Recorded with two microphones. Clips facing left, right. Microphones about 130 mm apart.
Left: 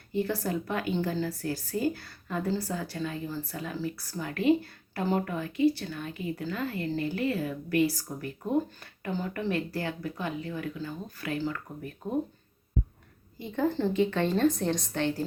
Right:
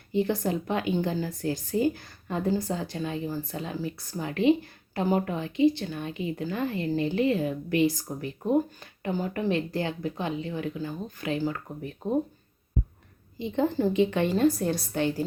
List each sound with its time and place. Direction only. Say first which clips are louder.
0.1 s a woman's voice: right 3 dB; 20° right (ahead or behind)
13.4 s a woman's voice: right 3 dB; 15° right (ahead or behind)